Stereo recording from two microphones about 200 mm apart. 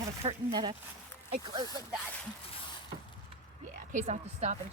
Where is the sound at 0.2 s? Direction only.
25° right (ahead or behind).